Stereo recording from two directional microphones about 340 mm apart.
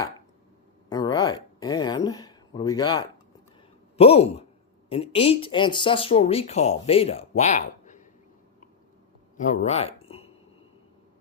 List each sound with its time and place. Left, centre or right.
0.9 s speech: centre
9.4 s speech: left